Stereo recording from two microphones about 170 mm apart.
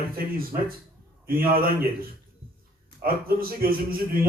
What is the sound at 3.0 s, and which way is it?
Speech, 60° right (ahead or behind).